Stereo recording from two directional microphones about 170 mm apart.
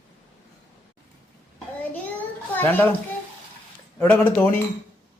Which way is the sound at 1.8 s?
10° left (ahead or behind).